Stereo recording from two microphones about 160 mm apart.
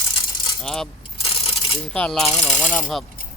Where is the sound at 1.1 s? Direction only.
35° left (ahead or behind).